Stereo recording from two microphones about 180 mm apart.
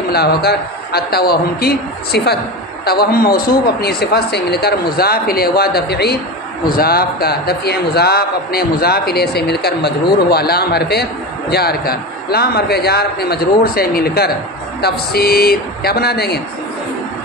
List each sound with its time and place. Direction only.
0.1 s a man's voice: 60° left (ahead or behind)